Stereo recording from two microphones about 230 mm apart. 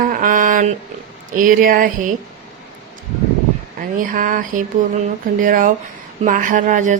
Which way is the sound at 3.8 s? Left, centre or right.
Right.